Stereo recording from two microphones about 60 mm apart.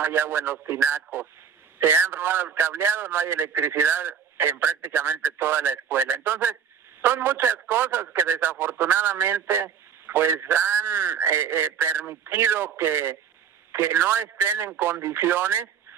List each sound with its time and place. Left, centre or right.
0.0 s a man's voice: right